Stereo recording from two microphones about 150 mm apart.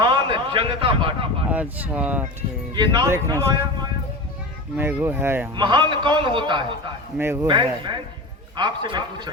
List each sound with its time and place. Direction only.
0.0 s speech: 30° right (ahead or behind)
1.5 s speech: 10° right (ahead or behind)
2.7 s a man's voice: 30° right (ahead or behind)
4.8 s speech: 15° right (ahead or behind)
5.5 s a man's voice: 30° right (ahead or behind)
7.2 s speech: 15° right (ahead or behind)
7.4 s a man's voice: 30° right (ahead or behind)